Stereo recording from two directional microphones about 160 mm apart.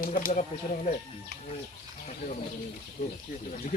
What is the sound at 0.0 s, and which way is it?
Speech, 60° left (ahead or behind).